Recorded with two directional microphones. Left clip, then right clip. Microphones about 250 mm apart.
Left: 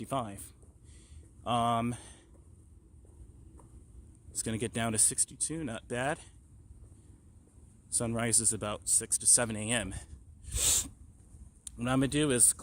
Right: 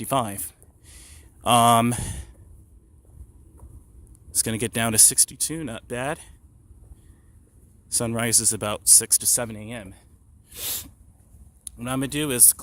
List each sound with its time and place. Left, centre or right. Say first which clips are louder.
0.0 s speech: right 11 dB; right
0.9 s a sound: right 14 dB; right
4.3 s speech: right 9 dB; right
7.9 s speech: right 8 dB; centre
9.5 s speech: left 3 dB; centre
10.5 s sneeze: left 3 dB; centre
11.6 s speech: right 2 dB; centre